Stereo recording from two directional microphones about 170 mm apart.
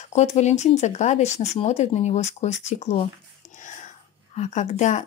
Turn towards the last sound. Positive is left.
turn(degrees=40)  # may be behind; listen again after turning